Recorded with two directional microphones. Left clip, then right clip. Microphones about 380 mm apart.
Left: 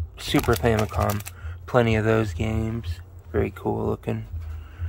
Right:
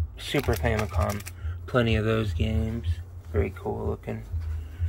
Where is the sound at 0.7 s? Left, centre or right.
Centre.